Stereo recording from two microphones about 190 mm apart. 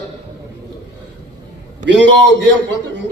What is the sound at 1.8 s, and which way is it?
Speech, 70° right (ahead or behind).